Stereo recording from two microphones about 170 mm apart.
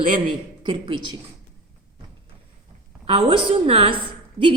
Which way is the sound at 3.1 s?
35° right (ahead or behind).